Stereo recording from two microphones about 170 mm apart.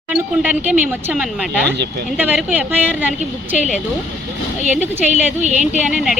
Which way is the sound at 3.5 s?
45° left (ahead or behind).